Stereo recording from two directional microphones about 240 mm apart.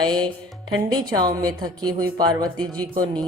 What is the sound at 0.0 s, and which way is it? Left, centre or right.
Music, centre.